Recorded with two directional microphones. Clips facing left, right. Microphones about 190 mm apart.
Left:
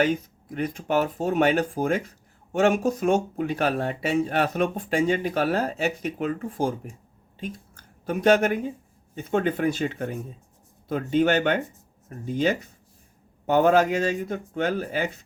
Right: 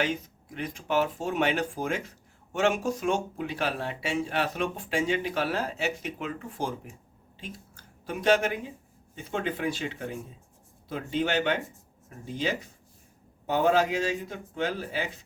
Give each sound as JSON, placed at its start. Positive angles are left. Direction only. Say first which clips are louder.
{"t": 0.0, "sound": "speech", "louder": "left 6 dB", "side_deg": 45}
{"t": 8.0, "sound": "speech", "louder": "left 5 dB", "side_deg": 45}